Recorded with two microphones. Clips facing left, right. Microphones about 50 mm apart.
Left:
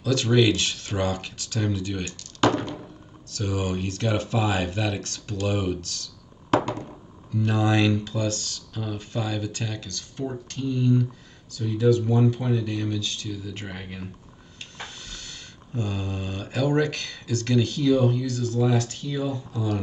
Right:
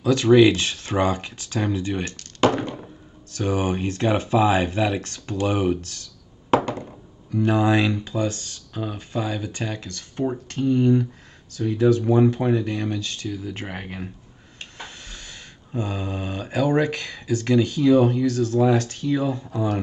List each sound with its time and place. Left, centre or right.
0.0 s speech: right
2.4 s a sound: right
3.3 s speech: right
7.3 s speech: centre
14.6 s a sound: right
18.0 s speech: right